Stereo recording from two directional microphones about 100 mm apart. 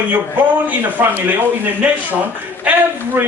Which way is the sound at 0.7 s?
20° right (ahead or behind).